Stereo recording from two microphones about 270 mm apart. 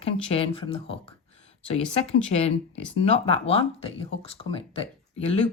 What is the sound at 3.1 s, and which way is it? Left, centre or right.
Speech, left.